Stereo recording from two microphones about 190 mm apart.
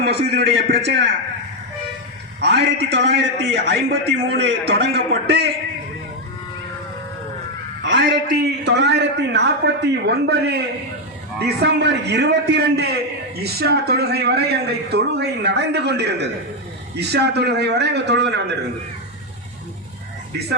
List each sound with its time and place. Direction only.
0.0 s a man's voice: 60° right (ahead or behind)
2.4 s a man's voice: 60° right (ahead or behind)
3.7 s a man's voice: 90° right
4.7 s a man's voice: 60° right (ahead or behind)
7.8 s a man's voice: 75° right (ahead or behind)